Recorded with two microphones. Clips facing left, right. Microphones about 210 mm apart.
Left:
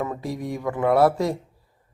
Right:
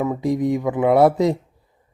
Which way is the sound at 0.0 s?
15° right (ahead or behind).